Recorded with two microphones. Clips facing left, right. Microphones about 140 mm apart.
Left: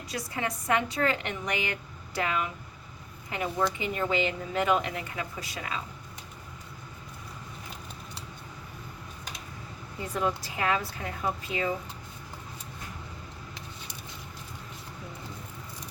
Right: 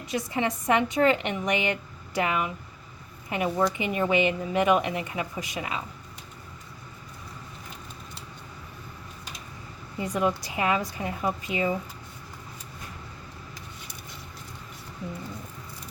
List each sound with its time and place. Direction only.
0.1 s speech: 20° right (ahead or behind)
10.0 s a woman's voice: 15° right (ahead or behind)